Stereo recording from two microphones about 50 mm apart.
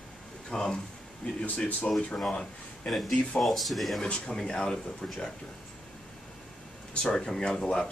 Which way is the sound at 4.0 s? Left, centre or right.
Centre.